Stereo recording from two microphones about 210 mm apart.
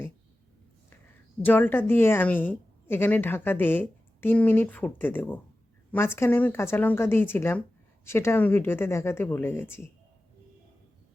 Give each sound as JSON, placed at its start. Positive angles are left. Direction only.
{"t": 1.5, "sound": "a woman's voice", "side_deg": 10}